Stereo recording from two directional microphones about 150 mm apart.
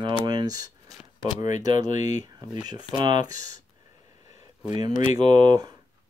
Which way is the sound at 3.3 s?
60° left (ahead or behind).